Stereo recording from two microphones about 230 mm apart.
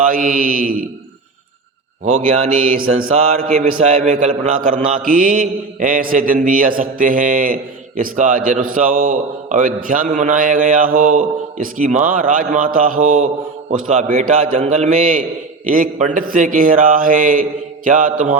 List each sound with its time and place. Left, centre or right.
0.1 s a man's voice: right
2.0 s a man's voice: right